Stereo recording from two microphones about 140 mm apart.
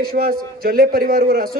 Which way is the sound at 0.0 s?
90° right.